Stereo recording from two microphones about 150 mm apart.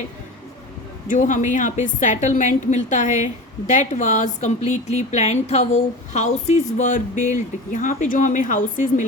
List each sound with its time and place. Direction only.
1.0 s speech: 55° left (ahead or behind)